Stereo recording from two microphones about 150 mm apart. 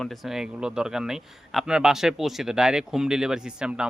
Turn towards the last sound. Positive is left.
turn(degrees=-5)  # may be behind; listen again after turning